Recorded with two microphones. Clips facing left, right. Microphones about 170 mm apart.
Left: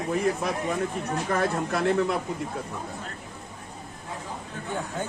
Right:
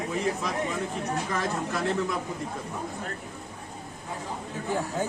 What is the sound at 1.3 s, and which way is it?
Speech, 60° left (ahead or behind).